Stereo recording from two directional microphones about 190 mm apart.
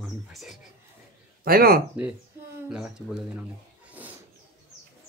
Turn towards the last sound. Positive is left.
turn(degrees=-10)  # may be behind; listen again after turning